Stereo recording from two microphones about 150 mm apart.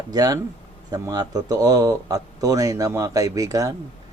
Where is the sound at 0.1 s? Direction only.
25° right (ahead or behind).